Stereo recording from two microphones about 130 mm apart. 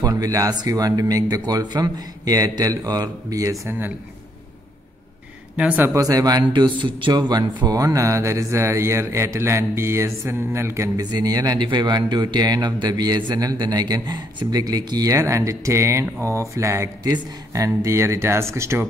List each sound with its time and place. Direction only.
0.0 s speech: 30° right (ahead or behind)
5.6 s speech: 10° right (ahead or behind)
5.9 s speech: 30° right (ahead or behind)
11.1 s speech: 30° right (ahead or behind)